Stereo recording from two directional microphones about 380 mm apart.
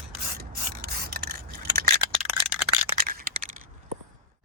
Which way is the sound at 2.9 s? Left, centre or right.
Right.